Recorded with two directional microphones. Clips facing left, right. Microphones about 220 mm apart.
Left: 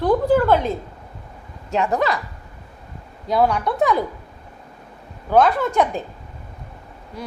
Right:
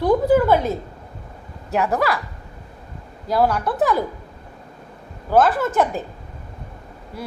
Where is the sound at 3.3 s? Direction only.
Centre (ahead or behind).